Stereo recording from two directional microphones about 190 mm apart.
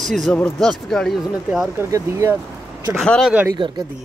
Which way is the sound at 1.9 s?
15° right (ahead or behind).